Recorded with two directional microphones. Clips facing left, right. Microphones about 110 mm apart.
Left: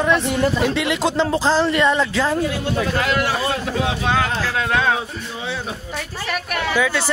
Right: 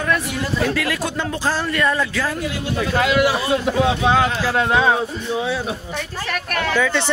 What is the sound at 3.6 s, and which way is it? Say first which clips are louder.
Speech: right 4 dB; 20° right (ahead or behind).